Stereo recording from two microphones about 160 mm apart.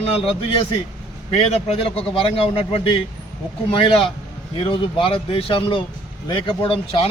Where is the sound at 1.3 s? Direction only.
40° left (ahead or behind).